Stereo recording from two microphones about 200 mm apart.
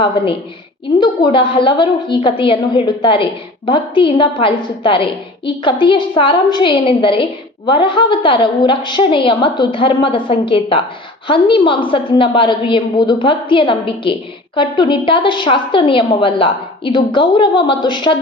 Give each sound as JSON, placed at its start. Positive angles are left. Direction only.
{"t": 0.9, "sound": "a woman's voice", "side_deg": 25}